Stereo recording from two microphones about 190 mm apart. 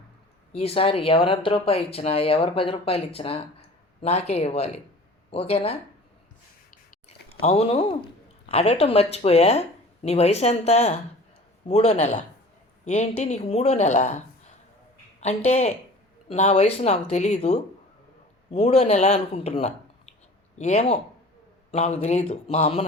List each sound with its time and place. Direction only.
0.5 s speech: 30° left (ahead or behind)
7.4 s speech: 35° left (ahead or behind)
15.2 s speech: 35° left (ahead or behind)